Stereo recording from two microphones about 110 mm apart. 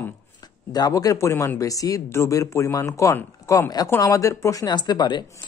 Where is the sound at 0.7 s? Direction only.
35° left (ahead or behind).